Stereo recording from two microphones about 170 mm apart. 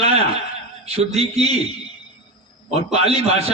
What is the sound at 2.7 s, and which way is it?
Speech, 40° right (ahead or behind).